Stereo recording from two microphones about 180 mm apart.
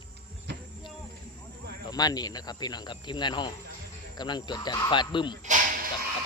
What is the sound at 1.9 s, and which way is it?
Speech, 20° left (ahead or behind).